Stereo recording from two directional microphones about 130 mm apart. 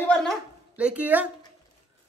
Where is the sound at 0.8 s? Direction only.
10° right (ahead or behind).